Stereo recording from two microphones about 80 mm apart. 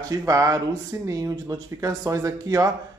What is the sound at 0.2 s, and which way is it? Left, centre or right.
Speech, right.